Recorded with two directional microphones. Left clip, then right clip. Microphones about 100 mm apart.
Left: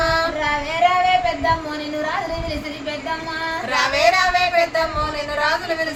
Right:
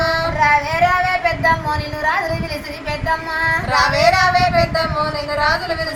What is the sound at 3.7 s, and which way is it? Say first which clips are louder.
Speech: right 1 dB; 40° left (ahead or behind).